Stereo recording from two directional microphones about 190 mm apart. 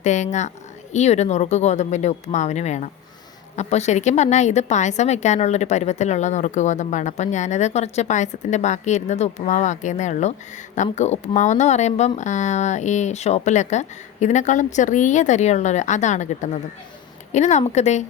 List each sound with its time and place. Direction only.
0.0 s a woman's voice: 40° left (ahead or behind)